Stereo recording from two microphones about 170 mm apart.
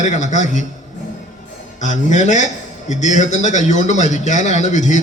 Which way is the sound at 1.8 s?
45° left (ahead or behind).